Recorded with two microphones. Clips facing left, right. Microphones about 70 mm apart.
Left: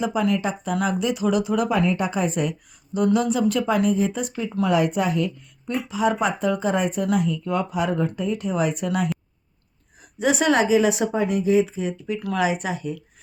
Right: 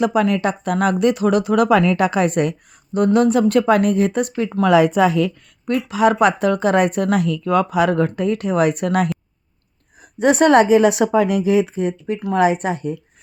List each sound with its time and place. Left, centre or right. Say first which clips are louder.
0.0 s speech: right 5 dB; right
4.6 s a woman's voice: right 7 dB; right
10.2 s speech: right 7 dB; right